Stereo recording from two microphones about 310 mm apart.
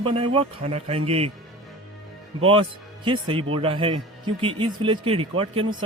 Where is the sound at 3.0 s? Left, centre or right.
Centre.